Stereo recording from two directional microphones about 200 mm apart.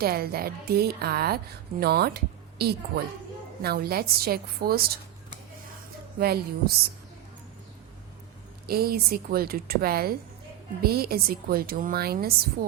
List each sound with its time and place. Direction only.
0.0 s speech: 50° right (ahead or behind)
6.1 s speech: 50° right (ahead or behind)
8.6 s speech: 50° right (ahead or behind)